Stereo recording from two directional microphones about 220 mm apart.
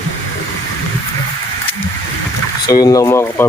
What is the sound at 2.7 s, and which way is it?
Speech, 15° left (ahead or behind).